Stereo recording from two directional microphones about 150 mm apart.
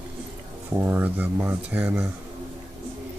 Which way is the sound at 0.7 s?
15° right (ahead or behind).